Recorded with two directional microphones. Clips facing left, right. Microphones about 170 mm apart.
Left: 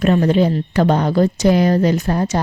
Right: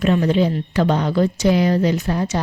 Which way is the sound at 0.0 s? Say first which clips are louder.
Left 2 dB; 45° left (ahead or behind).